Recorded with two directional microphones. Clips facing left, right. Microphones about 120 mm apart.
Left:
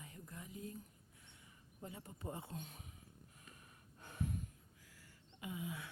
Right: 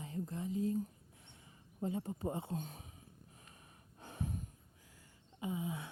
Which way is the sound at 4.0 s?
30° right (ahead or behind).